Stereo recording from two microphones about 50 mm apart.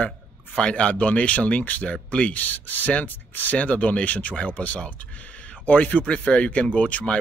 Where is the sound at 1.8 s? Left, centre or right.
Centre.